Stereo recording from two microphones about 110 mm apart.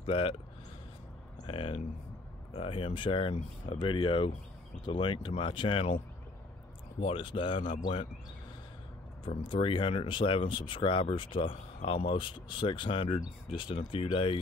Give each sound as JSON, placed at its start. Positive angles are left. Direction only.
{"t": 0.0, "sound": "speech", "side_deg": 55}
{"t": 1.4, "sound": "speech", "side_deg": 55}
{"t": 7.0, "sound": "speech", "side_deg": 55}
{"t": 9.2, "sound": "speech", "side_deg": 50}